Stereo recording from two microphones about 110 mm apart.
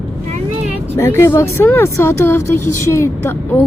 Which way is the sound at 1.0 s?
25° left (ahead or behind).